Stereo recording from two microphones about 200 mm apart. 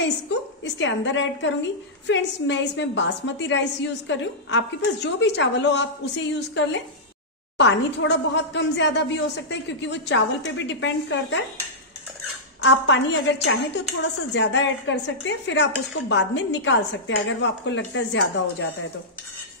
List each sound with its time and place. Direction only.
0.7 s a woman's voice: 65° left (ahead or behind)
12.6 s a woman's voice: 65° left (ahead or behind)
14.3 s a woman's voice: 65° left (ahead or behind)